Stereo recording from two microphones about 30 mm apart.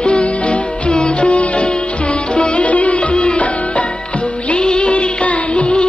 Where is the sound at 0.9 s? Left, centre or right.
Left.